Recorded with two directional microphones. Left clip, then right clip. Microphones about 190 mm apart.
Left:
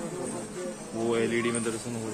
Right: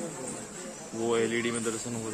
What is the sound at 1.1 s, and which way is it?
Speech, 30° right (ahead or behind).